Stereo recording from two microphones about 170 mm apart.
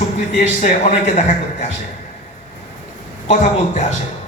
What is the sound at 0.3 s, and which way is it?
Speech, 45° left (ahead or behind).